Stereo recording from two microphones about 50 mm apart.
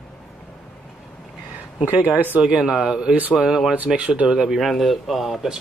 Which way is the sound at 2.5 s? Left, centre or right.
Centre.